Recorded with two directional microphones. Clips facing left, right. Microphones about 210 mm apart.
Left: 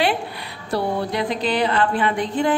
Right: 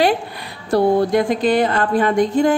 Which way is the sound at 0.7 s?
45° right (ahead or behind).